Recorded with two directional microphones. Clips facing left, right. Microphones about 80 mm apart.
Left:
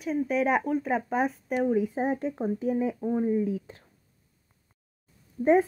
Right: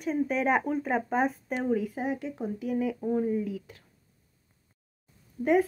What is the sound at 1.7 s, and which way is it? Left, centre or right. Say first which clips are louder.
Speech: left 2 dB; left.